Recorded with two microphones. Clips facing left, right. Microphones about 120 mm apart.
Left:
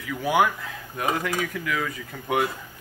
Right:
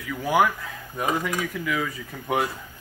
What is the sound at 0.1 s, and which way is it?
Speech, 5° right (ahead or behind).